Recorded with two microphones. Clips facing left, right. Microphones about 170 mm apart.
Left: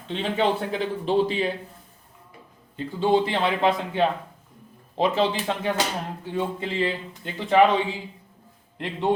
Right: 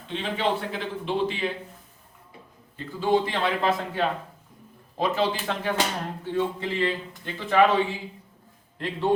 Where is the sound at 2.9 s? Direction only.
25° left (ahead or behind).